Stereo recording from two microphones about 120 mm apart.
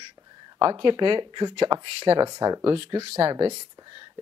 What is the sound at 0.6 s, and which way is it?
Speech, 40° right (ahead or behind).